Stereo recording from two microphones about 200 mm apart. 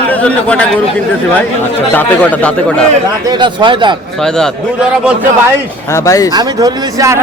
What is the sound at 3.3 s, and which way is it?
Speech, 25° right (ahead or behind).